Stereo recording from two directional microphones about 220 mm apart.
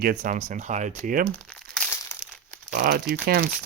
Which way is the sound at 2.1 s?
15° left (ahead or behind).